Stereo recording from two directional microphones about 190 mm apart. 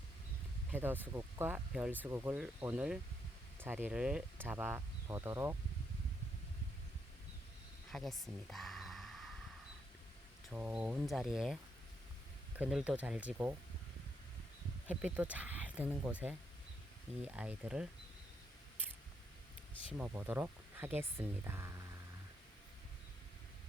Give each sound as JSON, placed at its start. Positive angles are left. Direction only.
{"t": 0.7, "sound": "speech", "side_deg": -10}
{"t": 7.9, "sound": "a sound", "side_deg": 0}
{"t": 10.5, "sound": "speech", "side_deg": -5}
{"t": 14.8, "sound": "speech", "side_deg": -10}
{"t": 20.1, "sound": "speech", "side_deg": -10}